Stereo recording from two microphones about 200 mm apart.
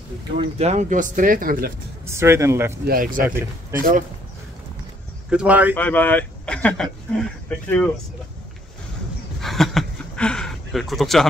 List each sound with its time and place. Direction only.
0.4 s speech: 30° right (ahead or behind)
2.0 s speech: 15° right (ahead or behind)
2.8 s speech: 45° right (ahead or behind)
5.3 s speech: 5° right (ahead or behind)
5.8 s speech: 10° left (ahead or behind)
9.4 s a sound: centre (ahead or behind)